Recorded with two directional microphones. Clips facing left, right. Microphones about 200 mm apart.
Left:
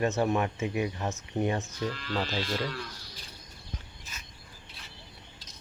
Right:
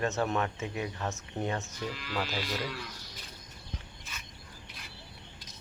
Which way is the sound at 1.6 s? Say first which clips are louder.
Left 4 dB; 5° right (ahead or behind).